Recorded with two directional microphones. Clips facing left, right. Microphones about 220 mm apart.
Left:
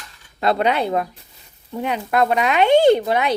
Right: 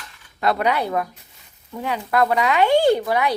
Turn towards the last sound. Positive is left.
turn(degrees=20)  # may be behind; listen again after turning